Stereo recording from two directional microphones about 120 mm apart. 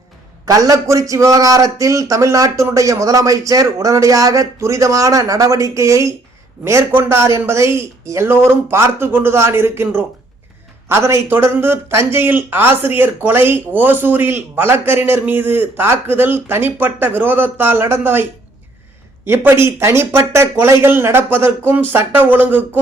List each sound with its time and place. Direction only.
0.4 s a man's voice: 30° right (ahead or behind)